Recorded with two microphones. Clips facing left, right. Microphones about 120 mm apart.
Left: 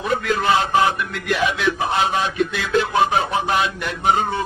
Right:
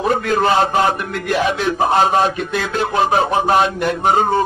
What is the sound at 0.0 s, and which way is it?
A man's voice, 40° right (ahead or behind).